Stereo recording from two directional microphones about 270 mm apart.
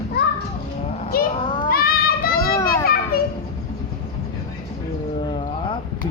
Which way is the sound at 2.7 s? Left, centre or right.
Left.